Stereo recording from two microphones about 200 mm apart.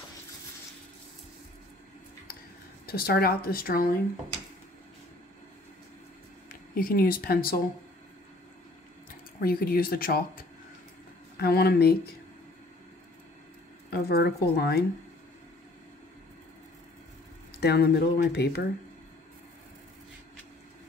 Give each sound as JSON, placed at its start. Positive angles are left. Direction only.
{"t": 2.9, "sound": "a woman's voice", "side_deg": 50}
{"t": 6.5, "sound": "speech", "side_deg": 45}
{"t": 9.4, "sound": "a woman's voice", "side_deg": 50}
{"t": 13.8, "sound": "a woman's voice", "side_deg": 50}
{"t": 17.6, "sound": "speech", "side_deg": 55}